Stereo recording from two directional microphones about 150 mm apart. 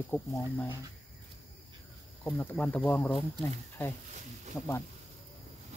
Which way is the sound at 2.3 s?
10° left (ahead or behind).